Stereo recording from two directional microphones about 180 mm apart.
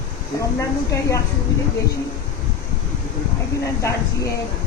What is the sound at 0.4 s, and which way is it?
Speech, 15° left (ahead or behind).